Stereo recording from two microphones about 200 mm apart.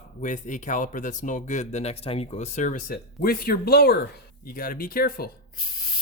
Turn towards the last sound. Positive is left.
turn(degrees=45)  # may be behind; listen again after turning